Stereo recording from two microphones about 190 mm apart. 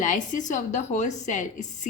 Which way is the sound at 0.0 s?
40° left (ahead or behind).